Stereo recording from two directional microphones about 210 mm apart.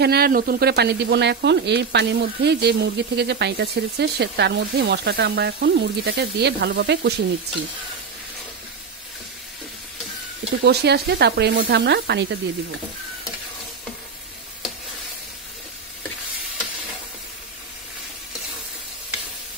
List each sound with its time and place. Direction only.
0.0 s speech: 50° right (ahead or behind)
10.6 s speech: 50° right (ahead or behind)